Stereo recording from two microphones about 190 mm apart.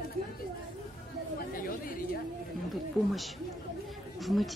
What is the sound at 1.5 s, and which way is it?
Speech, 50° left (ahead or behind).